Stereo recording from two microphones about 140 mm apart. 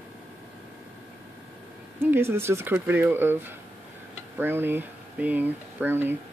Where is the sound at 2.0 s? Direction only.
15° right (ahead or behind).